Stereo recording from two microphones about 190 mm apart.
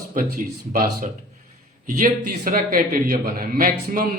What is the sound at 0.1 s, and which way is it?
Speech, 50° right (ahead or behind).